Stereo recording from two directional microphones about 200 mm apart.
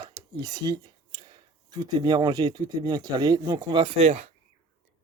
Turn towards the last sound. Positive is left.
turn(degrees=-30)  # may be behind; listen again after turning